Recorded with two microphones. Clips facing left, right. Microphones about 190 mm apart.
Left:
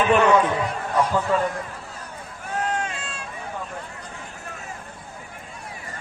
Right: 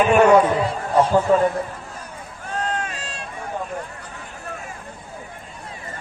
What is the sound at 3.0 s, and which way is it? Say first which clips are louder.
Run: right 2 dB; 35° right (ahead or behind).